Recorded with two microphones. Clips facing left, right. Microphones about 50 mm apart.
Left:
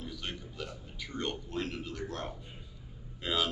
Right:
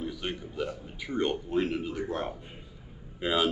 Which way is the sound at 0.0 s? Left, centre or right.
Centre.